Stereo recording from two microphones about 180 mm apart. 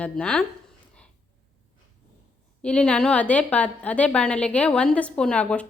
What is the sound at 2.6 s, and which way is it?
A woman's voice, 5° left (ahead or behind).